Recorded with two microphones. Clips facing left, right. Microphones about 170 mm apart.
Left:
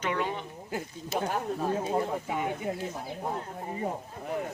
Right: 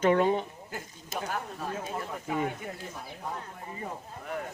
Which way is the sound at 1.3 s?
30° left (ahead or behind).